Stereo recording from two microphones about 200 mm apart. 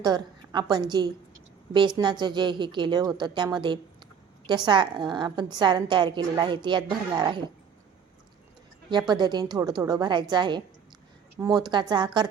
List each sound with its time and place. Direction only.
0.0 s a woman's voice: 20° right (ahead or behind)
8.9 s a woman's voice: 20° right (ahead or behind)